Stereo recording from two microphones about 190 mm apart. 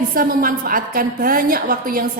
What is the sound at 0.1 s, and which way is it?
A woman's voice, 50° right (ahead or behind).